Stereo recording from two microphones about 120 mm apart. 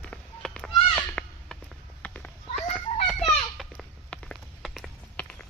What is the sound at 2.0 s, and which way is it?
Children playing, 10° left (ahead or behind).